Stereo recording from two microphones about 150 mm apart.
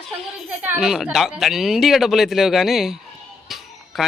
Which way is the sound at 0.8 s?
Centre (ahead or behind).